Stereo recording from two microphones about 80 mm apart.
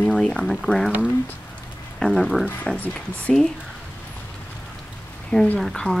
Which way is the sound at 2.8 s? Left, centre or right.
Centre.